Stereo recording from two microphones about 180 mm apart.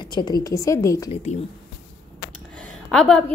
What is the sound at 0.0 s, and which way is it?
A woman's voice, 25° left (ahead or behind).